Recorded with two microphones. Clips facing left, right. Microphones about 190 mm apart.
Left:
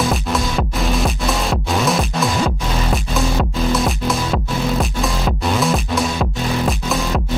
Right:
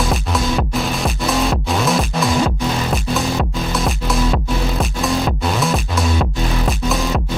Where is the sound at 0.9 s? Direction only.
Centre (ahead or behind).